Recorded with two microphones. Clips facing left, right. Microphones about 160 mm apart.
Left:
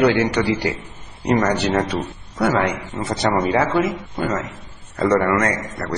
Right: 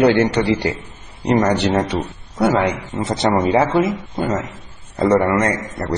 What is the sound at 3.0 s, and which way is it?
A man's voice, 20° right (ahead or behind).